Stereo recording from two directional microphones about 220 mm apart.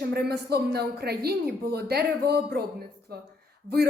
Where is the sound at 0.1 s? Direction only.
45° right (ahead or behind).